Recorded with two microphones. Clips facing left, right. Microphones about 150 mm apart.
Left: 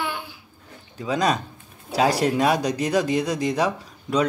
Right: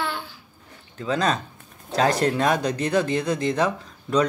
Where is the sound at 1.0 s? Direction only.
10° left (ahead or behind).